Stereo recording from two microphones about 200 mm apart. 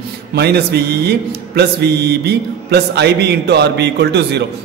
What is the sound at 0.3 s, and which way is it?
Mantra, 55° right (ahead or behind).